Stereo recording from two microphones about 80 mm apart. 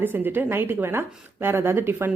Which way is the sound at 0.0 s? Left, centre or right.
Right.